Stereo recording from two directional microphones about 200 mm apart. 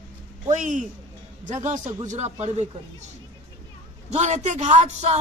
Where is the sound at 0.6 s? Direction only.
40° right (ahead or behind).